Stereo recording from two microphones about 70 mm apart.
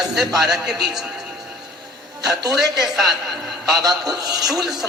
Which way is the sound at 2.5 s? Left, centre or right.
Right.